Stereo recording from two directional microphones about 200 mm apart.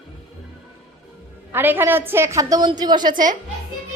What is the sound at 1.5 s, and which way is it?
A woman's voice, 10° right (ahead or behind).